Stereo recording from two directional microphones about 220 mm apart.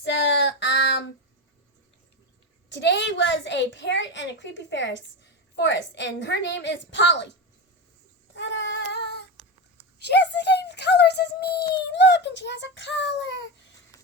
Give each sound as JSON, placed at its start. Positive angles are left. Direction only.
{"t": 0.0, "sound": "child singing", "side_deg": 55}
{"t": 2.7, "sound": "a woman's voice", "side_deg": 55}
{"t": 8.4, "sound": "child singing", "side_deg": 55}
{"t": 11.8, "sound": "a woman's voice", "side_deg": 50}